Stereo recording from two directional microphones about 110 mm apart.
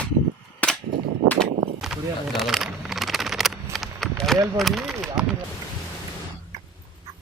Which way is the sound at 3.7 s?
Centre (ahead or behind).